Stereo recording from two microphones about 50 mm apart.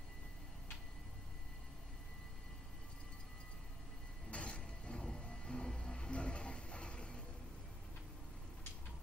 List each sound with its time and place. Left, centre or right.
4.3 s vehicle: left